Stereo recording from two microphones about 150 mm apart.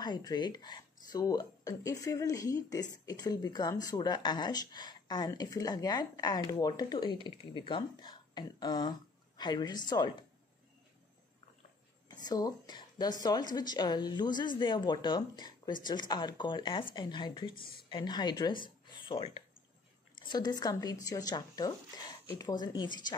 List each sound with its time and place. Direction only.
0.0 s speech: 30° left (ahead or behind)
12.1 s a woman's voice: 25° left (ahead or behind)